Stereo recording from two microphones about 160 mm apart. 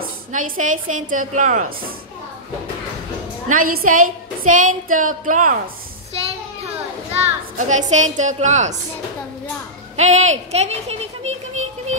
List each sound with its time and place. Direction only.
0.3 s a woman's voice: 55° right (ahead or behind)
3.4 s a woman's voice: 60° right (ahead or behind)
7.2 s a child's voice: 45° right (ahead or behind)
9.9 s speech: 45° right (ahead or behind)